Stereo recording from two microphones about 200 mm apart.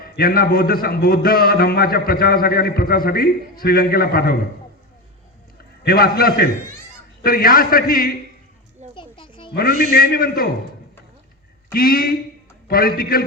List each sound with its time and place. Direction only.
0.0 s a man's voice: 45° left (ahead or behind)
5.8 s a man's voice: 50° left (ahead or behind)
9.0 s children playing: 25° left (ahead or behind)
9.5 s a man's voice: 50° left (ahead or behind)
11.7 s a man's voice: 45° left (ahead or behind)